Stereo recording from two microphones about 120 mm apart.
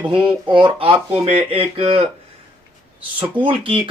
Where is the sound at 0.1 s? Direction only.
45° right (ahead or behind).